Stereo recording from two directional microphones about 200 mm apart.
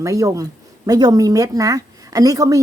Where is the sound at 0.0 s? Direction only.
15° right (ahead or behind).